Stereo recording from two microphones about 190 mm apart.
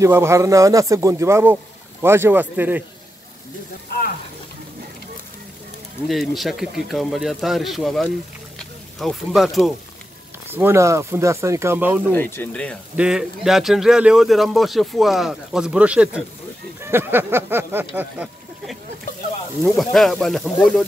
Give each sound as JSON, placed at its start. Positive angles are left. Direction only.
{"t": 0.0, "sound": "a man's voice", "side_deg": -15}
{"t": 6.0, "sound": "speech", "side_deg": 0}
{"t": 10.5, "sound": "a man's voice", "side_deg": -15}
{"t": 12.1, "sound": "speech", "side_deg": 10}
{"t": 12.9, "sound": "a man's voice", "side_deg": -5}